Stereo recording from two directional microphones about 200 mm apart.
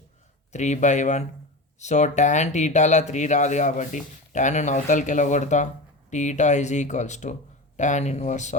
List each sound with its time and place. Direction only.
0.5 s speech: 35° left (ahead or behind)